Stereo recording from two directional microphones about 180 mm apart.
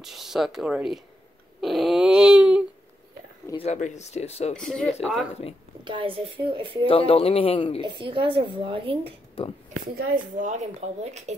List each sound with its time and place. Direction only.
0.0 s speech: centre (ahead or behind)
1.6 s a sound: centre (ahead or behind)
3.5 s speech: 40° left (ahead or behind)
4.6 s speech: 5° left (ahead or behind)
5.9 s a woman's voice: 30° right (ahead or behind)
6.9 s speech: 30° left (ahead or behind)
7.8 s a woman's voice: 25° right (ahead or behind)
9.4 s speech: 30° left (ahead or behind)
9.9 s a woman's voice: 45° right (ahead or behind)